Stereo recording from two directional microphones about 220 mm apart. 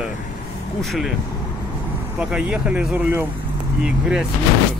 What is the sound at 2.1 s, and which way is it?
Speech, 5° right (ahead or behind).